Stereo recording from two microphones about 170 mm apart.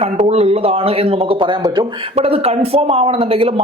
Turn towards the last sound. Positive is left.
turn(degrees=-35)  # may be behind; listen again after turning